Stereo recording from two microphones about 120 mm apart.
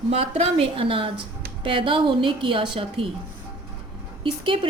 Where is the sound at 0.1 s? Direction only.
55° right (ahead or behind).